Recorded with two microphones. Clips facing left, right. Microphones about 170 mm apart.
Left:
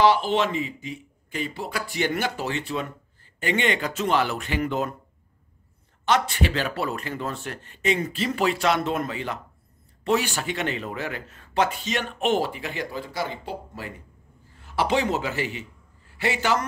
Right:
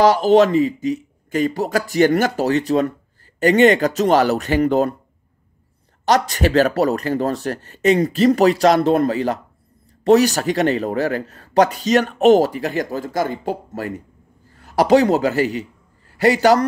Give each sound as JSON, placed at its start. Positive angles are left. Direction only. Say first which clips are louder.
{"t": 0.0, "sound": "speech", "louder": "right 8 dB", "side_deg": -40}
{"t": 6.0, "sound": "a man's voice", "louder": "right 6 dB", "side_deg": -40}